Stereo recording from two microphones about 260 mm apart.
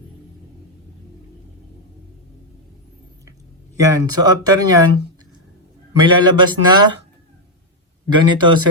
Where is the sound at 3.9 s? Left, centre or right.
Centre.